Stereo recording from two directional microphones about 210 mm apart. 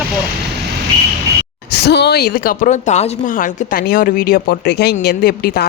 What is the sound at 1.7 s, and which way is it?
Speech, 50° left (ahead or behind).